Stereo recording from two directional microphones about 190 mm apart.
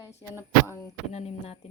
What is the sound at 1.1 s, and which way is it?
Speech, 35° left (ahead or behind).